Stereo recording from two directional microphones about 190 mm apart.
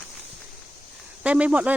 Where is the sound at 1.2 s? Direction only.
5° right (ahead or behind).